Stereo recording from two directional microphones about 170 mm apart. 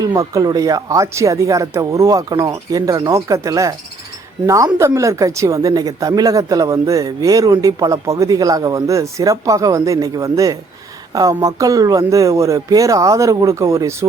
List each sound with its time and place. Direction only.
0.0 s speech: 20° right (ahead or behind)